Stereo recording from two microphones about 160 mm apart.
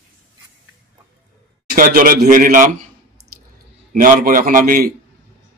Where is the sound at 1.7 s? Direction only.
65° right (ahead or behind).